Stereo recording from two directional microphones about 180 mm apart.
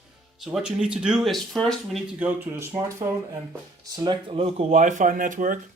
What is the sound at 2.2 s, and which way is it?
Speech, 10° right (ahead or behind).